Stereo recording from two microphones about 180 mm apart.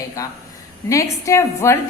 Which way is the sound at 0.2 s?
20° left (ahead or behind).